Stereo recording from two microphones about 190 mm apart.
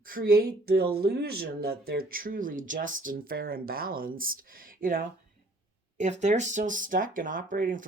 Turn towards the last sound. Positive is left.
turn(degrees=-45)  # may be behind; listen again after turning